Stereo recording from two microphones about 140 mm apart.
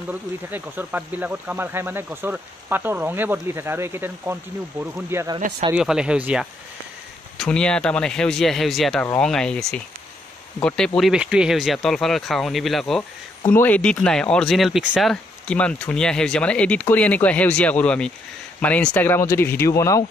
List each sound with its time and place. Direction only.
0.1 s speech: 15° right (ahead or behind)
5.8 s speech: 5° right (ahead or behind)
7.3 s speech: 5° left (ahead or behind)
11.0 s speech: 5° right (ahead or behind)
13.5 s speech: 10° left (ahead or behind)